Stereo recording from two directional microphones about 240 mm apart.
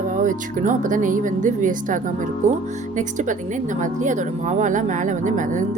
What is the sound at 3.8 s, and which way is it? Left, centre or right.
Speech, right.